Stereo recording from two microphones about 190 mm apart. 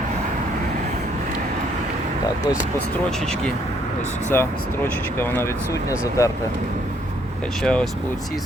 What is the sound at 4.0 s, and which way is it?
Speech, 35° left (ahead or behind).